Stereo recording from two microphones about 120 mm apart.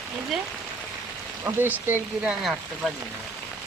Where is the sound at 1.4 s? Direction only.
15° right (ahead or behind).